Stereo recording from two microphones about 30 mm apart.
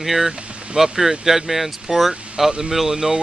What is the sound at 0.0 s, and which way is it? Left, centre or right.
Speech, centre.